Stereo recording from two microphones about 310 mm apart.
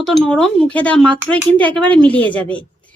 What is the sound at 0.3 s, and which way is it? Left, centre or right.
Speech, centre.